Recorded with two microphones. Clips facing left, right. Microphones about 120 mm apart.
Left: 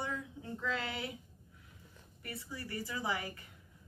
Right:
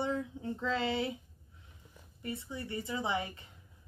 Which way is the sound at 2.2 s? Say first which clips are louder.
Right 5 dB; 20° right (ahead or behind).